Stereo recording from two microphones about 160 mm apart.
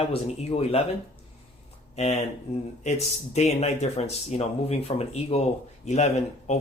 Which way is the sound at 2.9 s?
45° left (ahead or behind).